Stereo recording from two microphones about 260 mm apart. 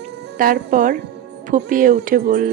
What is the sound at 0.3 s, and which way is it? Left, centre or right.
A woman's voice, right.